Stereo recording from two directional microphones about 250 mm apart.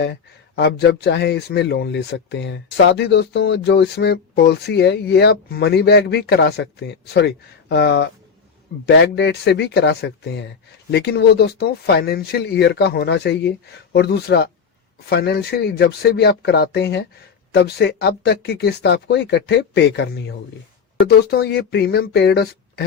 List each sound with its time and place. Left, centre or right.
0.0 s speech: left